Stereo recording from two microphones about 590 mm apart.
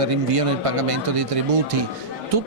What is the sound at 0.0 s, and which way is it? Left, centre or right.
A man's voice, right.